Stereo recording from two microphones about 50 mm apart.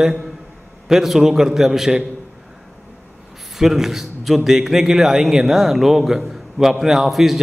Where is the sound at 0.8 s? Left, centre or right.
Centre.